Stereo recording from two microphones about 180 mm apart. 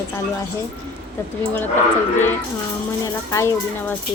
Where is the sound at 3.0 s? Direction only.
15° left (ahead or behind).